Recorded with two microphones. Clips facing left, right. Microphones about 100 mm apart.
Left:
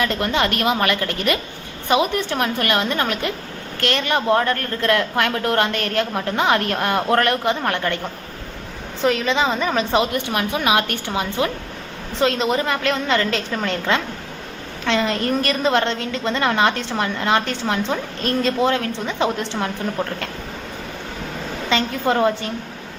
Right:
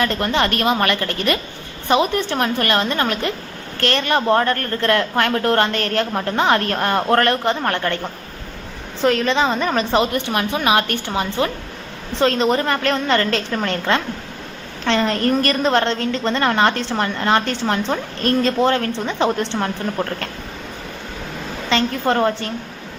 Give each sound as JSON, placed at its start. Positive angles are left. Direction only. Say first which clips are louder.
{"t": 0.0, "sound": "a woman's voice", "louder": "right 1 dB", "side_deg": 10}
{"t": 9.0, "sound": "a woman's voice", "louder": "right 2 dB", "side_deg": 5}
{"t": 21.7, "sound": "a woman's voice", "louder": "right 1 dB", "side_deg": 10}